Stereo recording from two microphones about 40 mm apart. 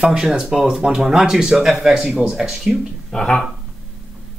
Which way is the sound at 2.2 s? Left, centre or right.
Centre.